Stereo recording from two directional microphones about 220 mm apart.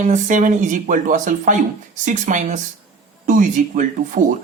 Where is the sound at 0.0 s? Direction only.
35° right (ahead or behind).